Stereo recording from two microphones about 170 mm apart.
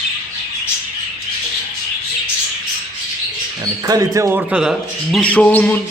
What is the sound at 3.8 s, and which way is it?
Speech, 20° right (ahead or behind).